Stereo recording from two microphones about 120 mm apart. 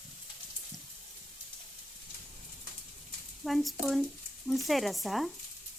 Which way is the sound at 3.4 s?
Centre (ahead or behind).